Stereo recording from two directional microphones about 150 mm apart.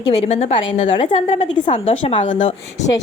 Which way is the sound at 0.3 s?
45° left (ahead or behind).